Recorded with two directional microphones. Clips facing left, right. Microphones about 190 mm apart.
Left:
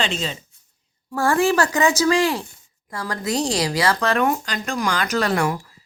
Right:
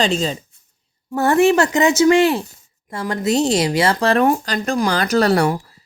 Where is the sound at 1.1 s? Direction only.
20° right (ahead or behind).